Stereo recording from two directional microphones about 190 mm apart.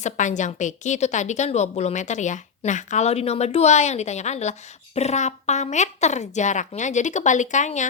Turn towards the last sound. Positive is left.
turn(degrees=40)  # may be behind; listen again after turning